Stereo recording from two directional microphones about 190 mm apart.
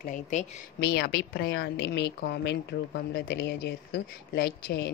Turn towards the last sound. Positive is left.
turn(degrees=60)  # may be behind; listen again after turning